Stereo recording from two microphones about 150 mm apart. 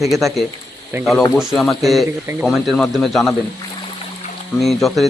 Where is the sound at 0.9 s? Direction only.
15° right (ahead or behind).